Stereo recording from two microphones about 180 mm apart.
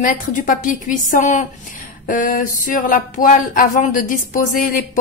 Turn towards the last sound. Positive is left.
turn(degrees=50)  # may be behind; listen again after turning